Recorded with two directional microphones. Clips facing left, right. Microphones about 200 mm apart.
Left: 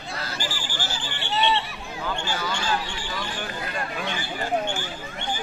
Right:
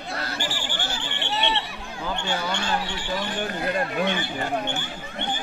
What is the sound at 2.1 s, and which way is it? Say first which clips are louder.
Speech: right 4 dB; 65° right (ahead or behind).